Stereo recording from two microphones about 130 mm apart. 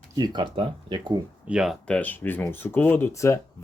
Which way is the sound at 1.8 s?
10° left (ahead or behind).